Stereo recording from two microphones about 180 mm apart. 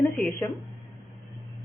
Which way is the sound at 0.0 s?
10° left (ahead or behind).